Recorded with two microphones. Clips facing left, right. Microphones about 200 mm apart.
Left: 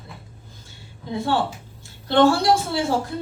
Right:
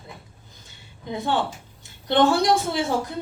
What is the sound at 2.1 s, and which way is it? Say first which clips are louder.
Speech: left 2 dB; 20° right (ahead or behind).